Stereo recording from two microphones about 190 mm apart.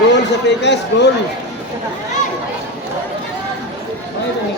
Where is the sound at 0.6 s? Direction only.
65° left (ahead or behind).